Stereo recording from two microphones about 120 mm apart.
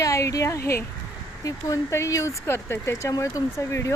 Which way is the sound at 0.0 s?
25° left (ahead or behind).